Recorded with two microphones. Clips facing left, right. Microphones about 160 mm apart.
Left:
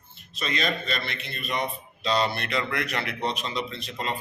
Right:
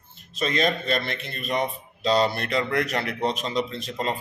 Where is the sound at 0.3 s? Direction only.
45° right (ahead or behind).